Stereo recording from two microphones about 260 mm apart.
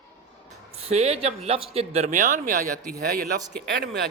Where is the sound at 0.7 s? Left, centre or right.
Right.